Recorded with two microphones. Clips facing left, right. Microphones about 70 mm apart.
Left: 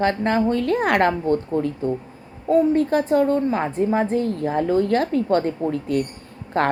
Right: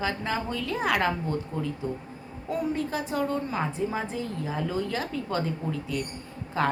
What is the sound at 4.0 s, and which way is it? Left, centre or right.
A woman's voice, left.